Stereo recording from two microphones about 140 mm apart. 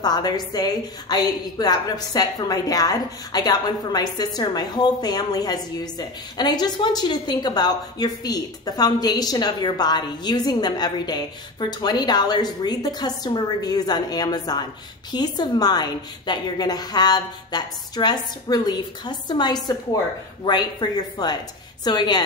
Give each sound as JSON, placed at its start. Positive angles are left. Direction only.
{"t": 0.0, "sound": "a woman's voice", "side_deg": 30}